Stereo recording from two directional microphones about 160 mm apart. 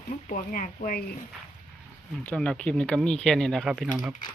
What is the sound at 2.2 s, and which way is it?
Speech, 5° left (ahead or behind).